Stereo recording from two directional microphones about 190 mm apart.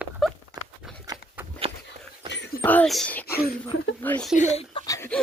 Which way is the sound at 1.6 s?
30° right (ahead or behind).